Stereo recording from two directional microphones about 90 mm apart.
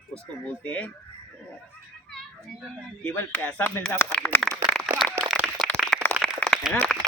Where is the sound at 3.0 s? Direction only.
20° left (ahead or behind).